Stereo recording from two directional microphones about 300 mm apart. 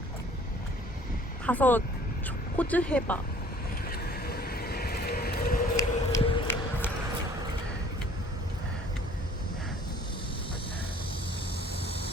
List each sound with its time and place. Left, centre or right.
1.5 s speech: centre
3.8 s vehicle: left
5.7 s a sound: centre